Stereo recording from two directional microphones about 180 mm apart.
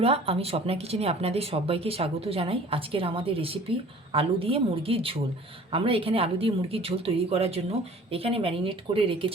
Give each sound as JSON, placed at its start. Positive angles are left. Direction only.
{"t": 0.0, "sound": "speech", "side_deg": -35}